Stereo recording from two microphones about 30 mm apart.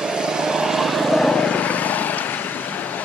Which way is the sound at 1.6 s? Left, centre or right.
Left.